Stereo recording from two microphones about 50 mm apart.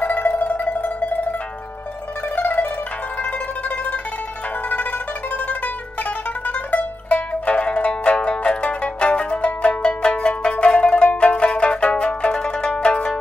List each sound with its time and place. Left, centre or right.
0.0 s zither: left
2.3 s zither: left
6.4 s zither: left